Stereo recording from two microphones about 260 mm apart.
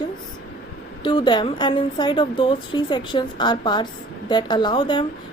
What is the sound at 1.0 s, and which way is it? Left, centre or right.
A woman's voice, centre.